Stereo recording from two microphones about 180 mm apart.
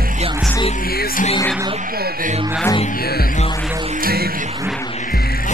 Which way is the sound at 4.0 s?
60° right (ahead or behind).